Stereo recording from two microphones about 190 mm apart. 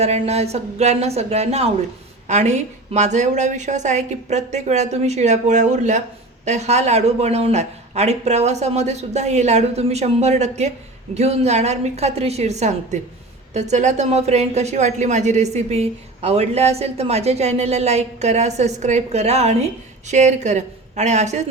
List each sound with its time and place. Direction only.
0.0 s a woman's voice: 35° right (ahead or behind)